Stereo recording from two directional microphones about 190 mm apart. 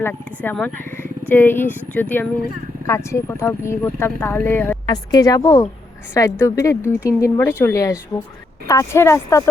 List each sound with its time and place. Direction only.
0.0 s speech: 10° left (ahead or behind)